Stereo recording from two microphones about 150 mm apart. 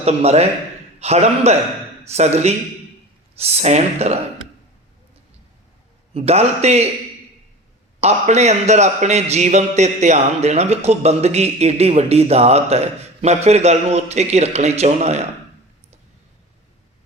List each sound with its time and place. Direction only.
0.0 s a man's voice: 45° right (ahead or behind)
6.1 s a man's voice: 45° right (ahead or behind)
8.0 s a man's voice: 50° right (ahead or behind)